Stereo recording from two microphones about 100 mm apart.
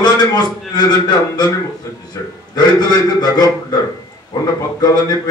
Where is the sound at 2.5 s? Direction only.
45° left (ahead or behind).